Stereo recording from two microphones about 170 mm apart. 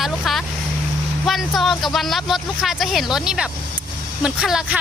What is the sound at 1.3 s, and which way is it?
A woman's voice, centre (ahead or behind).